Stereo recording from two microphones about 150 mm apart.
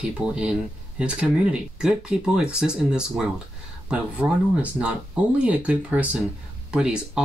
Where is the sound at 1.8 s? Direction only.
5° right (ahead or behind).